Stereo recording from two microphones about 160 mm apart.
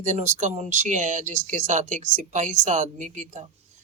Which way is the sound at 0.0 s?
50° right (ahead or behind).